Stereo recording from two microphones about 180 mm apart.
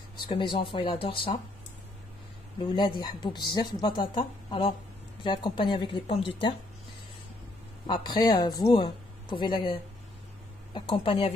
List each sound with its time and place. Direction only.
0.3 s speech: 25° left (ahead or behind)
2.6 s speech: 25° left (ahead or behind)
7.8 s speech: 25° left (ahead or behind)